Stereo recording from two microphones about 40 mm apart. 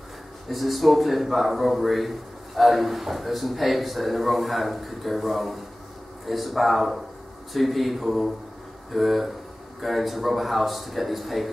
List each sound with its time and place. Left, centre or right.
0.5 s a man's voice: centre